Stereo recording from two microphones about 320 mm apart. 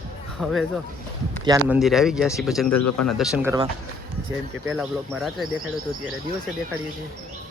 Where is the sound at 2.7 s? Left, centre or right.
Left.